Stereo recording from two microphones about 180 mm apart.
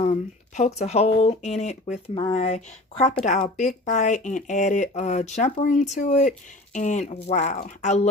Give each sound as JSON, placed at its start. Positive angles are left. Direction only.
{"t": 0.0, "sound": "speech", "side_deg": 40}